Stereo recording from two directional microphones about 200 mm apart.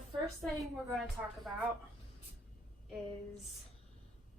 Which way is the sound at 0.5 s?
15° right (ahead or behind).